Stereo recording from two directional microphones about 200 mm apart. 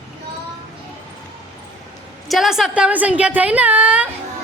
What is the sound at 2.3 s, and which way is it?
A woman's voice, centre (ahead or behind).